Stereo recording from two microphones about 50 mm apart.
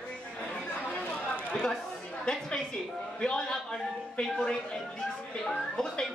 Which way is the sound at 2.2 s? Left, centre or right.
Centre.